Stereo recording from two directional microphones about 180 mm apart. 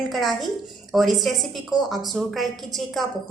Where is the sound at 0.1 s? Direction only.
Centre (ahead or behind).